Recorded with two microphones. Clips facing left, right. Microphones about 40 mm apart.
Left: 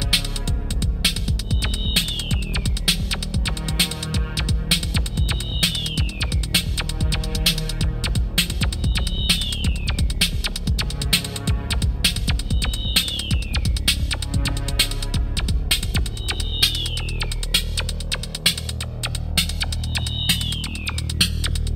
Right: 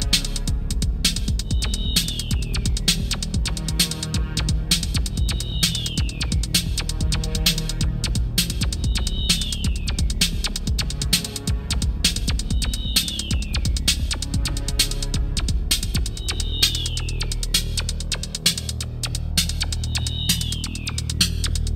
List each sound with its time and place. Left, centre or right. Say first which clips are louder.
0.1 s music: left 1 dB; centre
13.3 s music: left 1 dB; centre
14.3 s music: left 3 dB; left
18.1 s hum: left 2 dB; centre
19.3 s pulse: left 2 dB; centre